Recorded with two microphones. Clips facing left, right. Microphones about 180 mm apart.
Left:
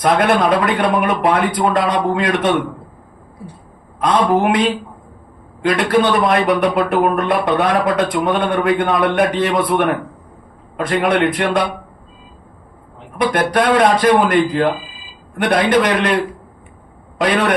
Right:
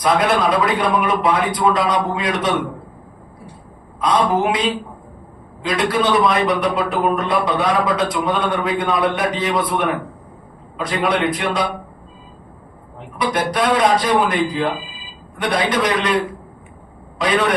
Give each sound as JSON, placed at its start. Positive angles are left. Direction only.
{"t": 0.0, "sound": "a man's voice", "side_deg": 60}
{"t": 4.0, "sound": "a man's voice", "side_deg": 60}
{"t": 13.1, "sound": "a man's voice", "side_deg": 60}
{"t": 17.2, "sound": "a man's voice", "side_deg": 55}